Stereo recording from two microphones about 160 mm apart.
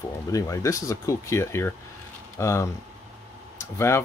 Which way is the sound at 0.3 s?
20° left (ahead or behind).